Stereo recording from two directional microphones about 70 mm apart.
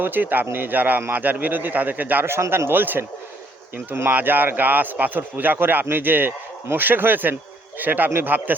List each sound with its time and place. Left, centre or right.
0.0 s speech: right